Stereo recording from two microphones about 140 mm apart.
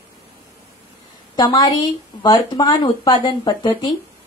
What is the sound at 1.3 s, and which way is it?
Speech, 30° left (ahead or behind).